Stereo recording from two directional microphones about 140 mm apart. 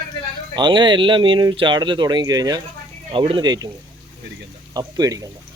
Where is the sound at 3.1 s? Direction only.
35° right (ahead or behind).